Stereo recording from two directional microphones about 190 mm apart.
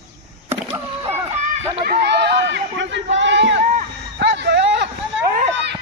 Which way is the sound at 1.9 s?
55° right (ahead or behind).